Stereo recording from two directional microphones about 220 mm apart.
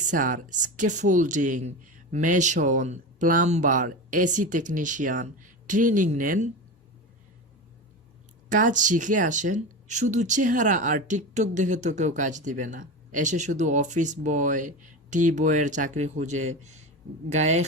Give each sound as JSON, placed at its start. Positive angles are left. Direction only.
{"t": 0.0, "sound": "speech", "side_deg": -35}
{"t": 8.4, "sound": "speech", "side_deg": -35}